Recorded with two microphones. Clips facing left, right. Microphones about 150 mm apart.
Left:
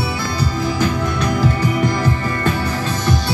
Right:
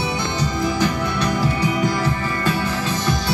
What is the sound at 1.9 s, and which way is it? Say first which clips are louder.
Music: left 2 dB; 45° left (ahead or behind).